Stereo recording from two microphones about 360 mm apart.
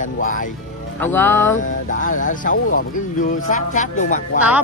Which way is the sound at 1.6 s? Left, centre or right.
Left.